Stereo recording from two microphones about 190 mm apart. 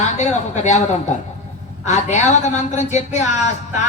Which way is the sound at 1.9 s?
40° left (ahead or behind).